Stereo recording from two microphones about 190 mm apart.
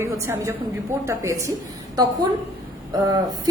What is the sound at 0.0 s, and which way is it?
A woman's voice, 15° right (ahead or behind).